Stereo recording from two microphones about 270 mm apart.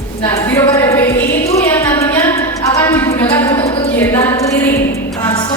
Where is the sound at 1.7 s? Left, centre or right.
Centre.